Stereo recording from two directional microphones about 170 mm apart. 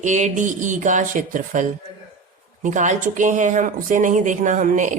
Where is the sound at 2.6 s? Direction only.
45° right (ahead or behind).